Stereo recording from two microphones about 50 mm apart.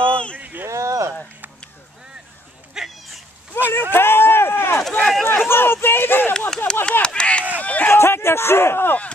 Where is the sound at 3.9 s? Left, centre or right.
Left.